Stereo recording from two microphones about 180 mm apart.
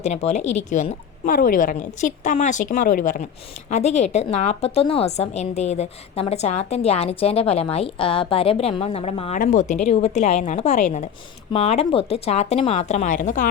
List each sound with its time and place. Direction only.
0.0 s a woman's voice: 40° left (ahead or behind)
9.4 s a woman's voice: 45° left (ahead or behind)